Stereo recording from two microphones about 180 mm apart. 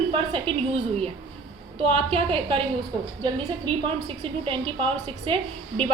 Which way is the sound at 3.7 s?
25° right (ahead or behind).